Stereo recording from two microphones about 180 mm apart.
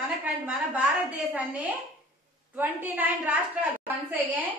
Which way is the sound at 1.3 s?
10° right (ahead or behind).